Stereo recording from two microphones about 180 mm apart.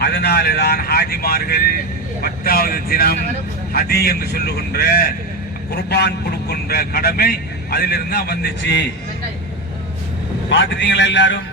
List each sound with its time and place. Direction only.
0.0 s a man's voice: 65° left (ahead or behind)
10.5 s a man's voice: 85° left